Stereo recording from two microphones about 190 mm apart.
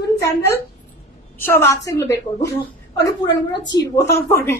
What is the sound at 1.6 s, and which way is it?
Speech, 15° left (ahead or behind).